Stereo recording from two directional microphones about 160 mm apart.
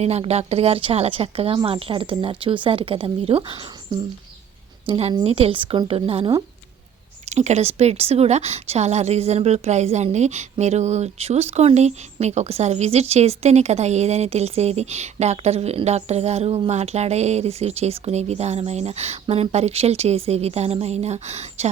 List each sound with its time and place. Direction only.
0.0 s a woman's voice: 40° right (ahead or behind)